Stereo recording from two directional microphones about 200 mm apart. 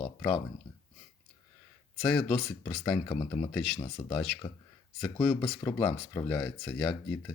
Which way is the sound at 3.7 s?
20° left (ahead or behind).